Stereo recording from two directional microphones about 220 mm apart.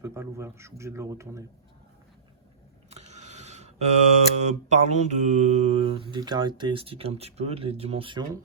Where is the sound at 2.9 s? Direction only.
30° right (ahead or behind).